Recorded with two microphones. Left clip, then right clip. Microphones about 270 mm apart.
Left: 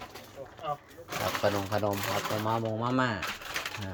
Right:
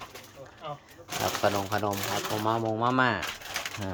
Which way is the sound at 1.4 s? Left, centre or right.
Centre.